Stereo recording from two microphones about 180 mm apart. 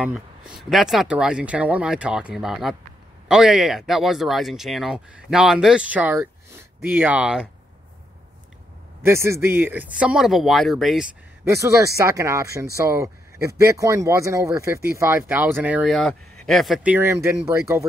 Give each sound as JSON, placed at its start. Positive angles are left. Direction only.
{"t": 0.0, "sound": "speech", "side_deg": 0}
{"t": 9.0, "sound": "speech", "side_deg": -15}
{"t": 11.4, "sound": "speech", "side_deg": -15}